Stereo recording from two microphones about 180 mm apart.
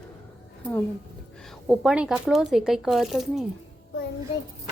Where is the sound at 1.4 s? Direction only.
Centre (ahead or behind).